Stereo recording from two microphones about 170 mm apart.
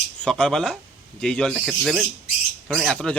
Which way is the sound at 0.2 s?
5° left (ahead or behind).